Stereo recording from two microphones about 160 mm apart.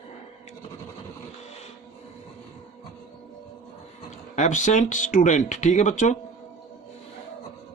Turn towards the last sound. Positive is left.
turn(degrees=50)  # may be behind; listen again after turning